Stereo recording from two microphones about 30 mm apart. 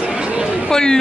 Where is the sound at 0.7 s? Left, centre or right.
Centre.